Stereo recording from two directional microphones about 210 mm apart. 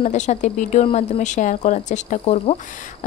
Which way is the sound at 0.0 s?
35° left (ahead or behind).